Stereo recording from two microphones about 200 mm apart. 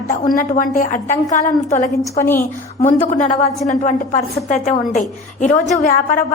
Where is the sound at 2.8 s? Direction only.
40° left (ahead or behind).